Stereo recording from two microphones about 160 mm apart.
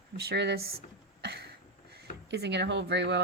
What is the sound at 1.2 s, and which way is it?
Cough, 90° right.